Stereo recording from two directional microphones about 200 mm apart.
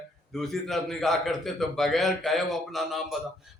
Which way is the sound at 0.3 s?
Centre (ahead or behind).